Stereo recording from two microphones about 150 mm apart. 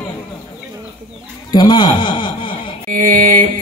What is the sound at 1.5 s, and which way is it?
Speech, 30° left (ahead or behind).